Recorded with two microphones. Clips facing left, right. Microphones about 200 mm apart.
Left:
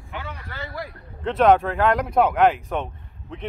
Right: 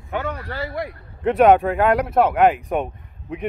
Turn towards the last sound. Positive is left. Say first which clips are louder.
# right 6 dB
turn(degrees=-10)  # may be behind; listen again after turning